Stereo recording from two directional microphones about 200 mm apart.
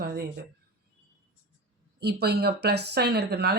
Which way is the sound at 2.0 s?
55° right (ahead or behind).